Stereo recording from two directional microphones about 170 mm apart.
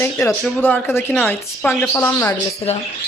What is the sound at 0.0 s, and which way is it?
A woman's voice, 15° left (ahead or behind).